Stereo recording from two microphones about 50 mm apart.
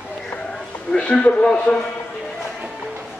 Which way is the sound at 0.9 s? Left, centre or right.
Centre.